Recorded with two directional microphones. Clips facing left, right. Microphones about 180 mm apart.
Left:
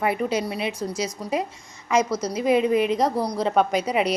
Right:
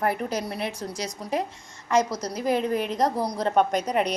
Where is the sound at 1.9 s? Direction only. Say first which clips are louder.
Left 2 dB; 40° right (ahead or behind).